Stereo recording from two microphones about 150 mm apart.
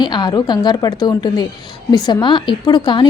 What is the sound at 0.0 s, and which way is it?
A woman's voice, 30° left (ahead or behind).